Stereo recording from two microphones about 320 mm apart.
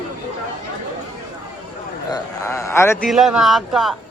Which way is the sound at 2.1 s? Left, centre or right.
Centre.